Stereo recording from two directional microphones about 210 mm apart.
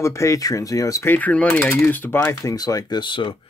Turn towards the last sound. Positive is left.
turn(degrees=25)  # may be behind; listen again after turning